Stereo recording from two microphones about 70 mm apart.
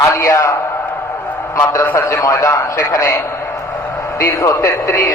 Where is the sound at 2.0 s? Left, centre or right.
Left.